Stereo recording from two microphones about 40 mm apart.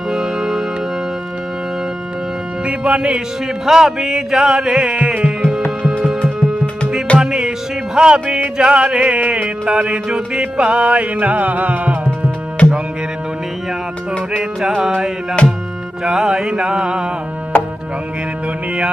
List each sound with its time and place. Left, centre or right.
0.1 s music: centre
2.6 s music: right
7.2 s music: centre; by 11.9 s right
12.6 s music: left
14.9 s music: centre